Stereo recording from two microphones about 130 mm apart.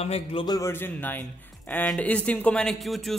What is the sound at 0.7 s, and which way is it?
A man's voice, 15° left (ahead or behind).